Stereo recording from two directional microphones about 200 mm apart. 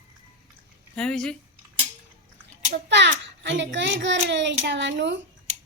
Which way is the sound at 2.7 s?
60° right (ahead or behind).